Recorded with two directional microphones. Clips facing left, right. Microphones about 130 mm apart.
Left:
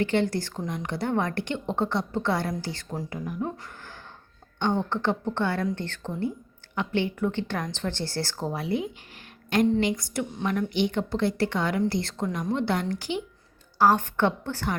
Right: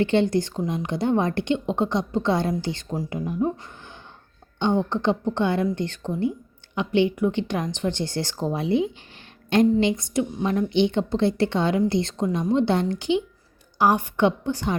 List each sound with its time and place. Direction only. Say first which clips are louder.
0.0 s a woman's voice: right 4 dB; 25° right (ahead or behind)